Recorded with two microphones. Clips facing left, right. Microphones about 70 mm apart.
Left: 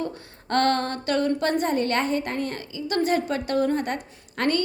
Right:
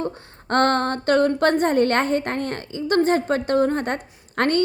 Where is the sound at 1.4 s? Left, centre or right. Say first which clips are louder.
Right 5 dB; right.